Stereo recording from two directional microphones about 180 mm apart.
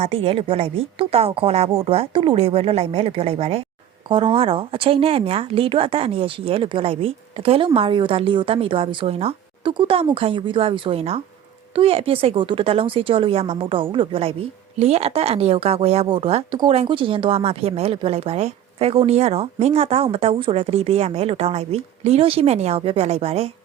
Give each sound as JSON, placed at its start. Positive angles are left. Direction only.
{"t": 0.0, "sound": "a woman's voice", "side_deg": -30}